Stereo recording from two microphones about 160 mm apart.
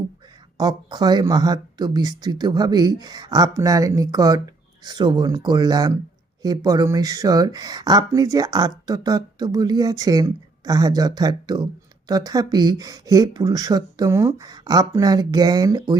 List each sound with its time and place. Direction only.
0.5 s speech: 25° right (ahead or behind)